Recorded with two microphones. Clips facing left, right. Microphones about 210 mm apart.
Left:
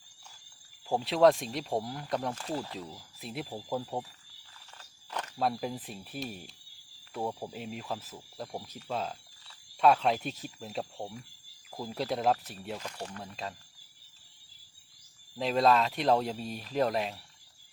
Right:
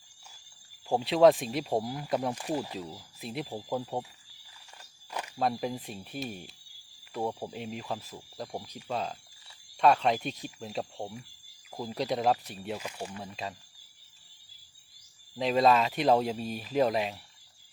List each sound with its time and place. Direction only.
0.9 s speech: centre (ahead or behind)
2.3 s speech: 15° right (ahead or behind)
3.2 s speech: centre (ahead or behind)
4.6 s walk: 10° right (ahead or behind)
5.4 s speech: centre (ahead or behind)
15.4 s speech: centre (ahead or behind)